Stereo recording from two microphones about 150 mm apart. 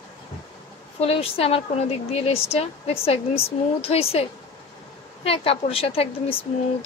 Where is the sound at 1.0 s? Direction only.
40° left (ahead or behind).